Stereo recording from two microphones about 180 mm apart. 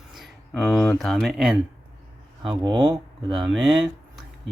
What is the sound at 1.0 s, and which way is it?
Speech, centre (ahead or behind).